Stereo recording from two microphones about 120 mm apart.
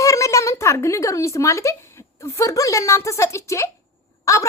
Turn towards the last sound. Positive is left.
turn(degrees=25)  # may be behind; listen again after turning